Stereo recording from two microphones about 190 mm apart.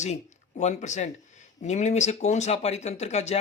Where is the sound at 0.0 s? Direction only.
35° left (ahead or behind).